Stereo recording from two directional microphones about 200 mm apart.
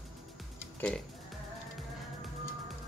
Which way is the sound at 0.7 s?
5° left (ahead or behind).